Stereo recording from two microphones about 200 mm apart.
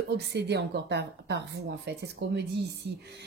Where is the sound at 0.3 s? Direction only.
55° right (ahead or behind).